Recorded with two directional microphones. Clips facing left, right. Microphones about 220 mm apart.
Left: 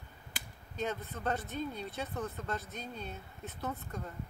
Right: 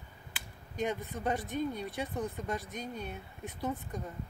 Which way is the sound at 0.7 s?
15° right (ahead or behind).